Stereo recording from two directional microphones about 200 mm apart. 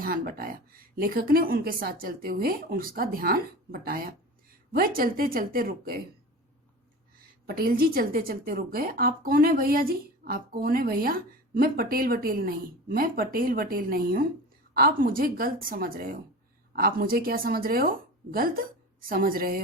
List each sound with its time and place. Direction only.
0.0 s a woman's voice: 45° right (ahead or behind)
7.4 s a woman's voice: 50° right (ahead or behind)